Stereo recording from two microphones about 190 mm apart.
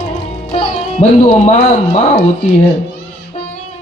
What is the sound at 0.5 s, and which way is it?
Speech, 30° left (ahead or behind).